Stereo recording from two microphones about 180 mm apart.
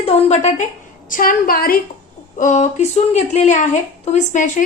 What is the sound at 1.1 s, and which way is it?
Speech, 50° left (ahead or behind).